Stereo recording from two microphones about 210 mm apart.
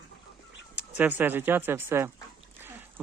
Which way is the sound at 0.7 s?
5° right (ahead or behind).